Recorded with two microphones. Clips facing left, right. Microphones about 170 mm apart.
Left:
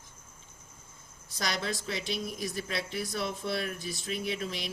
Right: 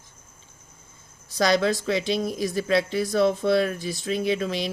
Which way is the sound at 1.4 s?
90° right.